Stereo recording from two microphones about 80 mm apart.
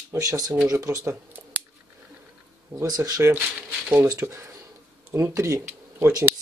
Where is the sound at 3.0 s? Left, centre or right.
Right.